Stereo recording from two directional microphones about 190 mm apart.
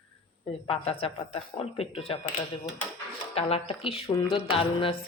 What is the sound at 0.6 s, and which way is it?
Speech, 30° left (ahead or behind).